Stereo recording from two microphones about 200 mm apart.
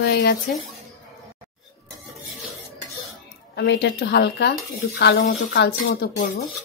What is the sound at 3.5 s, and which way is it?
Speech, 55° left (ahead or behind).